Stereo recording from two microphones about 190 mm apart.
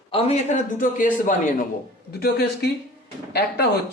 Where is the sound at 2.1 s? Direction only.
55° left (ahead or behind).